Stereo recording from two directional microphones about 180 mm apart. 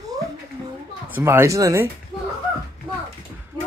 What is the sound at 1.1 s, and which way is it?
Speech, 15° right (ahead or behind).